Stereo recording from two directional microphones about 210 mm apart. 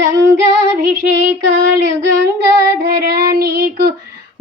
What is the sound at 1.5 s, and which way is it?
Female singing, 60° right (ahead or behind).